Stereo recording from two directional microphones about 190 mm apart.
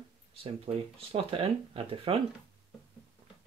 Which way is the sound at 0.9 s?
30° right (ahead or behind).